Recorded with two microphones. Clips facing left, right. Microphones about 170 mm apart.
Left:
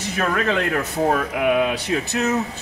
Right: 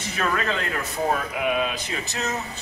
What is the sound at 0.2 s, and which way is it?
Speech, 55° left (ahead or behind).